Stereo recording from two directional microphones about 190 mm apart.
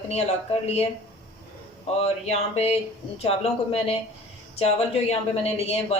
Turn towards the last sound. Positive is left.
turn(degrees=35)  # may be behind; listen again after turning